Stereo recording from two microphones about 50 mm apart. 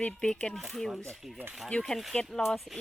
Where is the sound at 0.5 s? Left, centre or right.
Centre.